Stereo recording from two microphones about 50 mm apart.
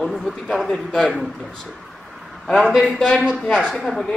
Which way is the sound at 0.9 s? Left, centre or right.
Centre.